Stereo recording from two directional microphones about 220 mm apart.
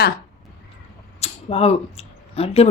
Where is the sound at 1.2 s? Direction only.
30° left (ahead or behind).